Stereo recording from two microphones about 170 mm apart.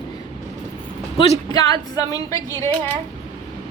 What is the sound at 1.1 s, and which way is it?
Speech, 25° left (ahead or behind).